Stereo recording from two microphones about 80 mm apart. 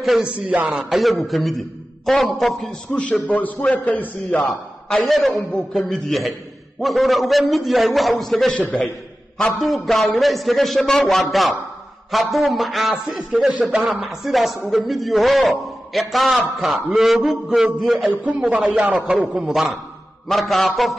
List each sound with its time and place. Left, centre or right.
0.0 s a man's voice: centre
2.9 s a man's voice: centre
4.4 s a man's voice: centre
8.5 s a man's voice: centre
9.6 s speech: centre
18.2 s a man's voice: centre